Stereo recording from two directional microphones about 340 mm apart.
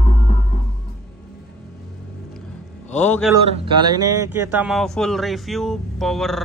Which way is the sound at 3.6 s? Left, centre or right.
Centre.